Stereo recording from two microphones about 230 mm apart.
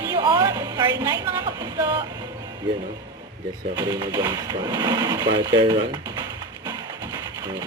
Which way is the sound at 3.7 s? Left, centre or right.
Centre.